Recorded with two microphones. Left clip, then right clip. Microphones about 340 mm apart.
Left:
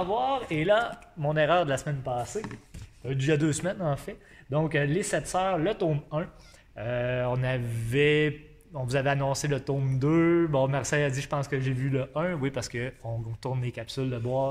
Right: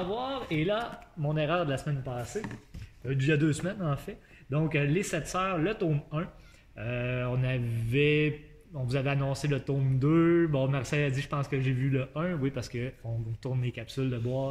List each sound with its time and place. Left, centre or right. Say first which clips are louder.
0.2 s speech: left 5 dB; left
3.1 s a man's voice: left 2 dB; centre